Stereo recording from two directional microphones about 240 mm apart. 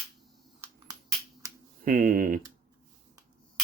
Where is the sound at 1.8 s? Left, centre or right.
Right.